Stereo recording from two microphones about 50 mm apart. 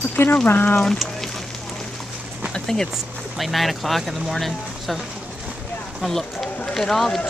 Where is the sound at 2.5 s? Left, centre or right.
Centre.